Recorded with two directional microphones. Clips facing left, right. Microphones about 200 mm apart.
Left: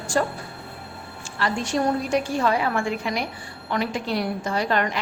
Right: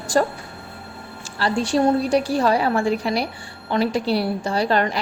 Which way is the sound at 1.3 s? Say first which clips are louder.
Right 4 dB; 30° right (ahead or behind).